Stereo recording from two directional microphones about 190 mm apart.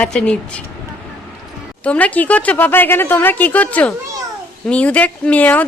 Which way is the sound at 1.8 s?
5° left (ahead or behind).